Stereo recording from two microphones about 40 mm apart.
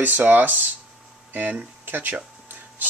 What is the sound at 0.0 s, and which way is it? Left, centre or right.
Speech, right.